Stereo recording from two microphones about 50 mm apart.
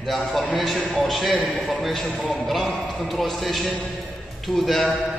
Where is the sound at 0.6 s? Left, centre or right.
Centre.